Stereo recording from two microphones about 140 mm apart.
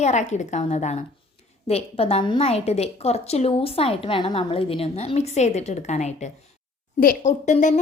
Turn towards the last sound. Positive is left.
turn(degrees=55)  # may be behind; listen again after turning